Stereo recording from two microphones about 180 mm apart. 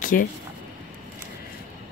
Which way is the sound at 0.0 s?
50° left (ahead or behind).